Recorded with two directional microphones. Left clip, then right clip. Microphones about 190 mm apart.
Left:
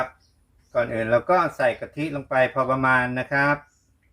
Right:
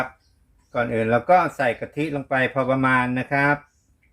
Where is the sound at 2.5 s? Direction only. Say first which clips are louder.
Even; 40° right (ahead or behind).